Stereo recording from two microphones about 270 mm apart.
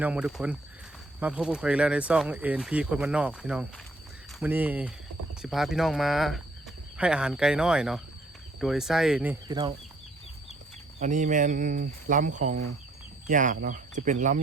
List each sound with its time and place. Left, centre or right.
0.0 s speech: centre
11.0 s speech: right